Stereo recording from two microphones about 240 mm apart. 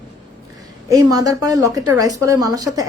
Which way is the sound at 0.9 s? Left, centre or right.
Centre.